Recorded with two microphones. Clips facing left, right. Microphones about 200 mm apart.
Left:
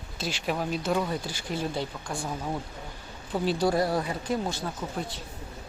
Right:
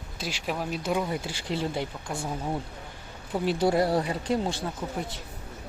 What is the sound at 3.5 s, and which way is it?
Speech, 25° right (ahead or behind).